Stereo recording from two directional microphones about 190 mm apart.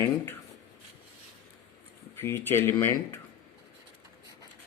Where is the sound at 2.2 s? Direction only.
10° left (ahead or behind).